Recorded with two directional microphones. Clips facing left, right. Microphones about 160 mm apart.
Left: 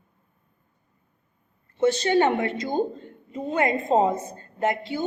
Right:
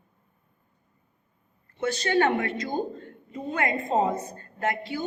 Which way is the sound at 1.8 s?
25° left (ahead or behind).